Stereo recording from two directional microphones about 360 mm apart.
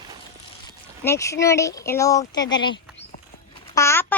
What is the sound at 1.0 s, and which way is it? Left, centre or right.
A child's voice, centre.